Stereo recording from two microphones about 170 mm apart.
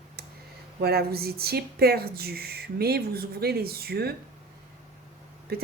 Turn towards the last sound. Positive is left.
turn(degrees=-65)  # may be behind; listen again after turning